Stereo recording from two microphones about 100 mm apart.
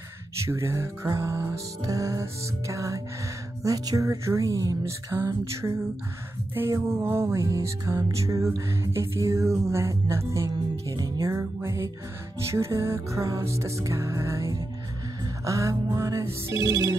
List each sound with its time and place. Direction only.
0.5 s music: 25° right (ahead or behind)
3.6 s telephone: 35° right (ahead or behind)
5.1 s music: 30° right (ahead or behind)
11.0 s telephone: 35° right (ahead or behind)
12.4 s music: 30° right (ahead or behind)
15.4 s telephone: 30° right (ahead or behind)